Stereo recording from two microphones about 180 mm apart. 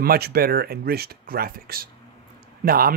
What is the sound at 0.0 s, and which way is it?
Speech, 55° right (ahead or behind).